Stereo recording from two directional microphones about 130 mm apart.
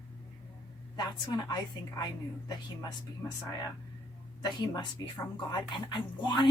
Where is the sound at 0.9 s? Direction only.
30° left (ahead or behind).